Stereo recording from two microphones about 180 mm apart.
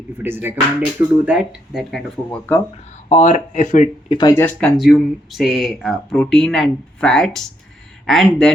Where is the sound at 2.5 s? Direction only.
10° left (ahead or behind).